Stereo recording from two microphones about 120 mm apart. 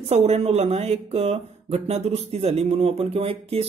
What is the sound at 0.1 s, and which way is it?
Speech, 60° right (ahead or behind).